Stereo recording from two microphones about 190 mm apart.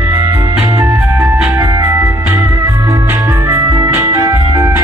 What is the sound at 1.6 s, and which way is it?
Music, 20° right (ahead or behind).